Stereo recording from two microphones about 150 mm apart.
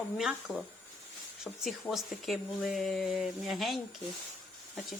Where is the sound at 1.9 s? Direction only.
Centre (ahead or behind).